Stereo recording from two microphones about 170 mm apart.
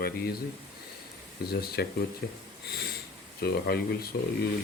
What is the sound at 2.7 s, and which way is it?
Sniff, 70° left (ahead or behind).